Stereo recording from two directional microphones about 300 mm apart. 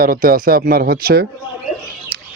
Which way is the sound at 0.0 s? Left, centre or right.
Right.